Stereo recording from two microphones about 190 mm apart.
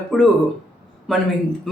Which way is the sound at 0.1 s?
Centre (ahead or behind).